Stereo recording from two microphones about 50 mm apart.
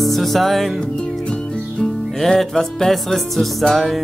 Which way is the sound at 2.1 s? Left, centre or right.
Centre.